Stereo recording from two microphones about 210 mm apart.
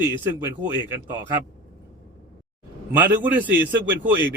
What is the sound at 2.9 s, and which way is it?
A man's voice, 10° right (ahead or behind).